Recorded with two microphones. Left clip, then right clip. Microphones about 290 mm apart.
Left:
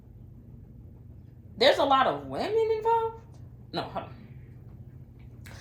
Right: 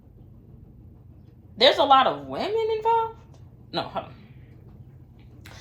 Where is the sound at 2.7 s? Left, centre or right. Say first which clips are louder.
Right 3 dB; right.